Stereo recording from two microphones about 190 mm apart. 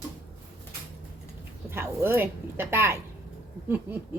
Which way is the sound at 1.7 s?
15° right (ahead or behind).